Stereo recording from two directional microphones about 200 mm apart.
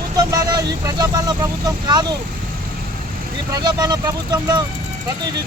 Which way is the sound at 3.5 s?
20° right (ahead or behind).